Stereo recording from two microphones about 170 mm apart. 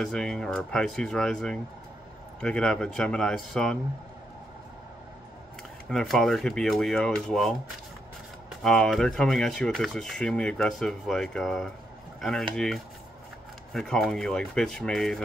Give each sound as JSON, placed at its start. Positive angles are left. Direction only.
{"t": 0.0, "sound": "speech", "side_deg": 5}
{"t": 5.9, "sound": "speech", "side_deg": 5}